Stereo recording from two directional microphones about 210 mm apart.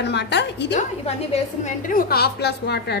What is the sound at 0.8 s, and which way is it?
A woman's voice, 30° left (ahead or behind).